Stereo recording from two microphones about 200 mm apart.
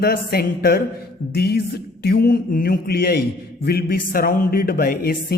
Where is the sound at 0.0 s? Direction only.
50° left (ahead or behind).